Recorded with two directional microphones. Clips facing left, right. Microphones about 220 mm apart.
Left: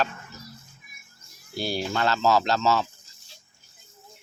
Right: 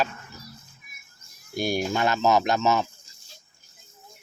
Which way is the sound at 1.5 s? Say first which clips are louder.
Right 3 dB; 15° right (ahead or behind).